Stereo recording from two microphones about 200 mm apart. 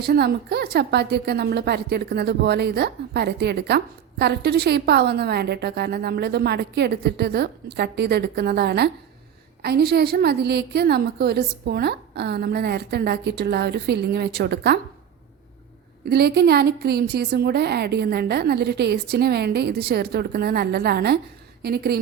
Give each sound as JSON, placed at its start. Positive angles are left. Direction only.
{"t": 0.0, "sound": "a woman's voice", "side_deg": -55}
{"t": 16.0, "sound": "a woman's voice", "side_deg": -55}